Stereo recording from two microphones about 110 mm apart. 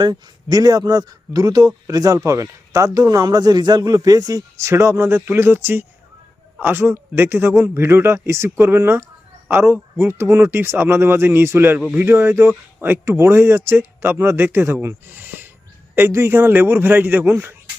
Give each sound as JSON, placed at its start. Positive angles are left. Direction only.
{"t": 0.0, "sound": "a man's voice", "side_deg": -35}
{"t": 11.8, "sound": "speech", "side_deg": -10}
{"t": 12.0, "sound": "a man's voice", "side_deg": -20}